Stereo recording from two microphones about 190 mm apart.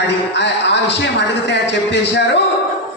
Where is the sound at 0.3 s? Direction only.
65° left (ahead or behind).